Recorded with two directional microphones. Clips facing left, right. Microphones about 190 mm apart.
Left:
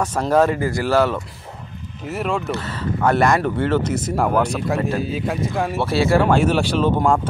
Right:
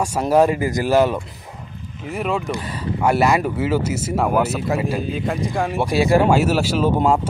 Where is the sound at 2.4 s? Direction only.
15° right (ahead or behind).